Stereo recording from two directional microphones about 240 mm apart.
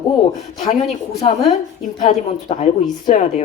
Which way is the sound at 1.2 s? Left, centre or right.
Left.